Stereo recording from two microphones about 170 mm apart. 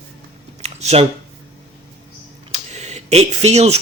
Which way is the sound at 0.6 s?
40° right (ahead or behind).